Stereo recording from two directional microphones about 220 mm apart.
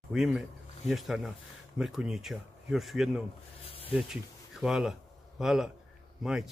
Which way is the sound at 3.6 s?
25° left (ahead or behind).